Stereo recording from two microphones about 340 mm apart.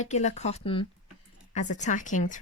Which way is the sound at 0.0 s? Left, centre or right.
Centre.